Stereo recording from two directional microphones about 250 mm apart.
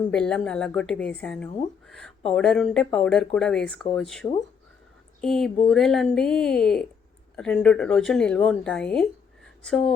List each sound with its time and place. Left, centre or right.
0.1 s speech: centre